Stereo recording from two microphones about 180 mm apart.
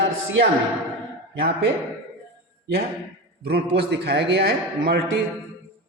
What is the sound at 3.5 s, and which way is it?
A man's voice, 65° right (ahead or behind).